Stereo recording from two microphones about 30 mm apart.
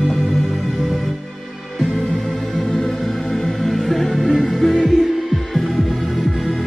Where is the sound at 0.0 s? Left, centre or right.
Centre.